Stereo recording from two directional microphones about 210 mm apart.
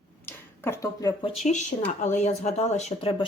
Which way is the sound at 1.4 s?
35° left (ahead or behind).